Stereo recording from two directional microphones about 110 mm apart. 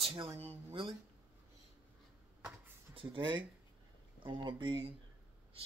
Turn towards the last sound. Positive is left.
turn(degrees=-45)  # may be behind; listen again after turning